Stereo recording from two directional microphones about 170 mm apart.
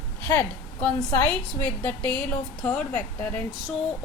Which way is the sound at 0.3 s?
10° left (ahead or behind).